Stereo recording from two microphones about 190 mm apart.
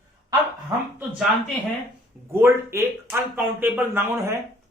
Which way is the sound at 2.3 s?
15° right (ahead or behind).